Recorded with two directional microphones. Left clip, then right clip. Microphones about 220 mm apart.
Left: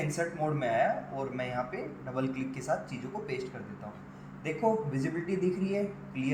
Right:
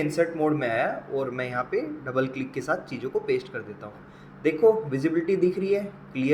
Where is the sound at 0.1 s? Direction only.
25° right (ahead or behind).